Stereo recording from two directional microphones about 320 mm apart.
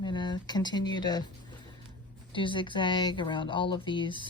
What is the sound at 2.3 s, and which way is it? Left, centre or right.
Speech, centre.